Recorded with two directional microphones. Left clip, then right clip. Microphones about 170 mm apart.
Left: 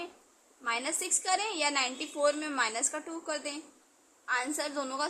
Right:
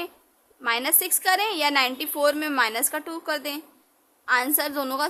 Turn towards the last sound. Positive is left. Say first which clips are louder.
# right 7 dB
turn(degrees=-45)  # may be behind; listen again after turning